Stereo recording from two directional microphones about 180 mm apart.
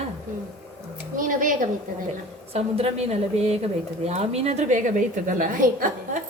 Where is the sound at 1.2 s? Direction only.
50° right (ahead or behind).